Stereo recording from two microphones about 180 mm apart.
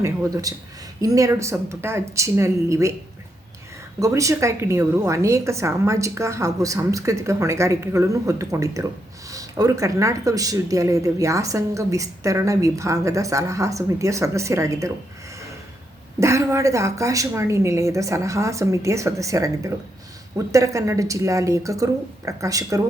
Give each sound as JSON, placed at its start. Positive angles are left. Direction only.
{"t": 0.0, "sound": "speech", "side_deg": -15}
{"t": 4.0, "sound": "speech", "side_deg": -15}
{"t": 16.2, "sound": "speech", "side_deg": -15}